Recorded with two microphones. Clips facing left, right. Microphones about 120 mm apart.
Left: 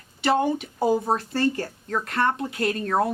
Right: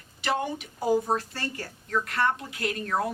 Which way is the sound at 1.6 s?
30° left (ahead or behind).